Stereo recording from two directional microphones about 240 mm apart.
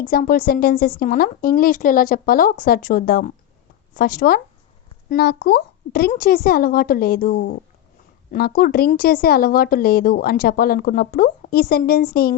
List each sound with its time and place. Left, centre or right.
0.0 s a woman's voice: left